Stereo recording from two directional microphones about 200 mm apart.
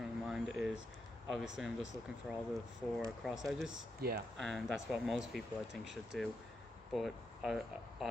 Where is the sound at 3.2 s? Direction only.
Centre (ahead or behind).